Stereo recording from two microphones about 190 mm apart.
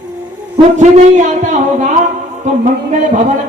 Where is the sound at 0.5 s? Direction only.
40° right (ahead or behind).